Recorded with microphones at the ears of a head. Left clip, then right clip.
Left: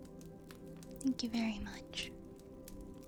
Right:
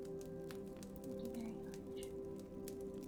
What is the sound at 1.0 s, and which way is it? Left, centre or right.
A woman's voice, left.